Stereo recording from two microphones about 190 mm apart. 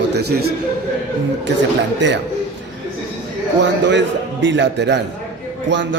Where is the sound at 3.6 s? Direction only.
70° right (ahead or behind).